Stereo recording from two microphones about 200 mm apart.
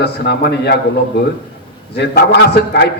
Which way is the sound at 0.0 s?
55° left (ahead or behind).